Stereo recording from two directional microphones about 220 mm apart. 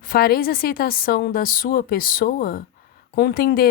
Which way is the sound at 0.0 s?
45° left (ahead or behind).